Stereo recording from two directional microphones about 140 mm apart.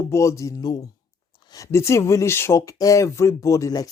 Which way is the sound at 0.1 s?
20° left (ahead or behind).